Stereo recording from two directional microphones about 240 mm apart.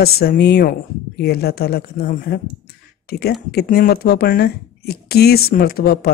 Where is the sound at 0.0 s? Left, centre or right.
Left.